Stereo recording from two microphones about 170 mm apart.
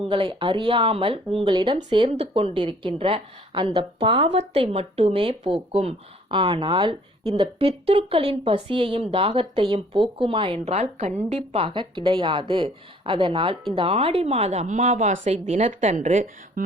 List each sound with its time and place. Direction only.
0.1 s a woman's voice: 30° right (ahead or behind); by 16.6 s 45° right (ahead or behind)